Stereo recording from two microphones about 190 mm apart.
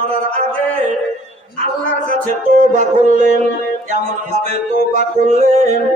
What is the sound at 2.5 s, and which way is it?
Music, 40° right (ahead or behind).